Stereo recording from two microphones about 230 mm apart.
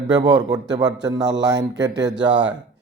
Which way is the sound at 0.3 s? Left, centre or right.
Right.